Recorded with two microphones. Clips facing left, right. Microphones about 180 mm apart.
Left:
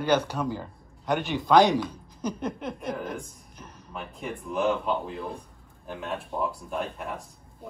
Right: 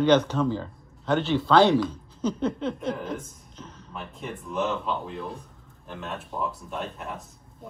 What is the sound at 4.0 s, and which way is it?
A man's voice, centre (ahead or behind).